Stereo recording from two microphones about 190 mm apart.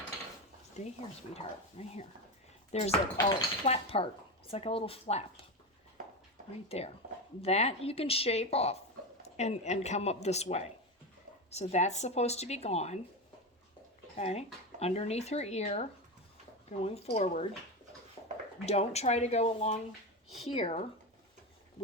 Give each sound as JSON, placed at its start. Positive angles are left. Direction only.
{"t": 1.3, "sound": "speech", "side_deg": 30}
{"t": 6.7, "sound": "speech", "side_deg": 30}
{"t": 14.2, "sound": "speech", "side_deg": 35}
{"t": 18.2, "sound": "a sound", "side_deg": 15}
{"t": 18.6, "sound": "speech", "side_deg": 35}